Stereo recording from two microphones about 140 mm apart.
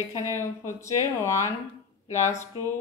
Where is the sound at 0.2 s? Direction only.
20° left (ahead or behind).